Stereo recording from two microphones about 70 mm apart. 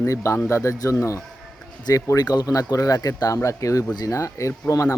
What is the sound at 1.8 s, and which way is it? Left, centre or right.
Speech, left.